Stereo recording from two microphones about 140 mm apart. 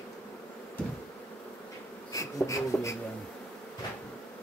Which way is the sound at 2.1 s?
25° left (ahead or behind).